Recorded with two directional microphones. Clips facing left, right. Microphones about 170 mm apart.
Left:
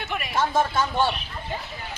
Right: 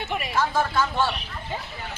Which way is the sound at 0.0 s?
25° right (ahead or behind).